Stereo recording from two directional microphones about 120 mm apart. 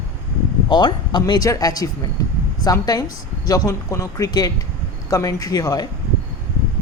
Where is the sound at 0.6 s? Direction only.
40° left (ahead or behind).